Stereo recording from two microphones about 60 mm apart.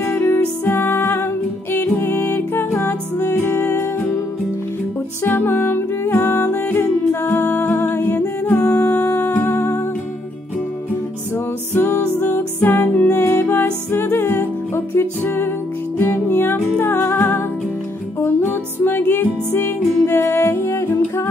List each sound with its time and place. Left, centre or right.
0.0 s music: left
5.2 s music: left
11.7 s music: left